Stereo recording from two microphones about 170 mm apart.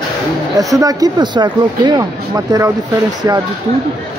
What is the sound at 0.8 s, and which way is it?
Speech, 20° right (ahead or behind).